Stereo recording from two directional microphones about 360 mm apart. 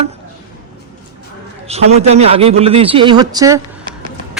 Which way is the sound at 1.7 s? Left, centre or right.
Centre.